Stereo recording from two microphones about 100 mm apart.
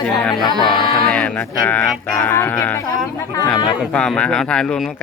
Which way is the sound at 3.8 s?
10° left (ahead or behind).